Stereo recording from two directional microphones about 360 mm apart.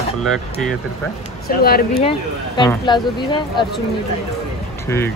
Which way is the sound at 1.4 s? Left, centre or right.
Left.